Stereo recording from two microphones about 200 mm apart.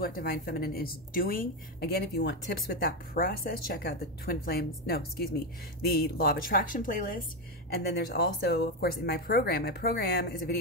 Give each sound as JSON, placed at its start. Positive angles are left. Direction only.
{"t": 0.0, "sound": "a woman's voice", "side_deg": 50}